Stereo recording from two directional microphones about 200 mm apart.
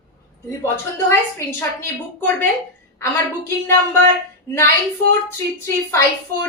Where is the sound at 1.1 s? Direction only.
10° left (ahead or behind).